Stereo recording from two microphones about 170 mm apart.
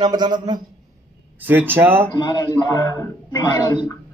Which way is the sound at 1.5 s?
10° right (ahead or behind).